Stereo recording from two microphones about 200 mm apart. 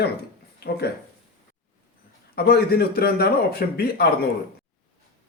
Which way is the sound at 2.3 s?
50° left (ahead or behind).